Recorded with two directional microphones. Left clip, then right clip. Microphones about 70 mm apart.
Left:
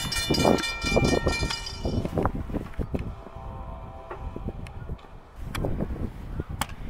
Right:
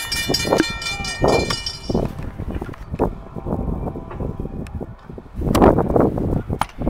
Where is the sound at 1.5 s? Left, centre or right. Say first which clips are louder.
Right 7 dB; right.